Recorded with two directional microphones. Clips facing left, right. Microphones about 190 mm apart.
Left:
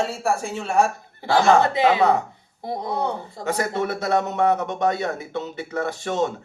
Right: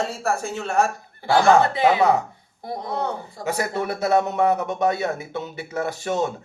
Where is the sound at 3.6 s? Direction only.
5° right (ahead or behind).